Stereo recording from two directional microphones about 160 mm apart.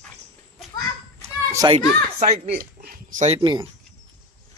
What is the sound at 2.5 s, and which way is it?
Dog, 65° right (ahead or behind).